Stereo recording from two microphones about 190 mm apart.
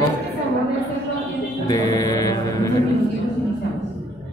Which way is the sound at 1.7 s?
20° left (ahead or behind).